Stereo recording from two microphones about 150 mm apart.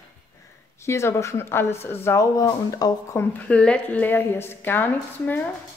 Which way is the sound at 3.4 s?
10° left (ahead or behind).